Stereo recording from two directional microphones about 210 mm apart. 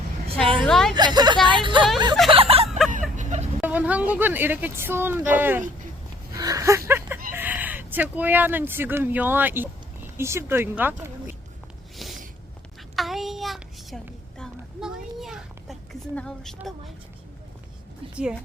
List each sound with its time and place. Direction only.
0.6 s a woman's voice: centre (ahead or behind)
0.9 s a woman's voice: 20° right (ahead or behind)
2.3 s a sound: 25° right (ahead or behind)
2.6 s music: centre (ahead or behind)
2.9 s vehicle: 35° right (ahead or behind)
3.6 s speech: 5° right (ahead or behind)
6.3 s a sound: 15° right (ahead or behind)
7.3 s speech: 10° right (ahead or behind)
11.9 s a sound: centre (ahead or behind)
13.0 s child singing: centre (ahead or behind)
18.1 s a woman's voice: 5° right (ahead or behind)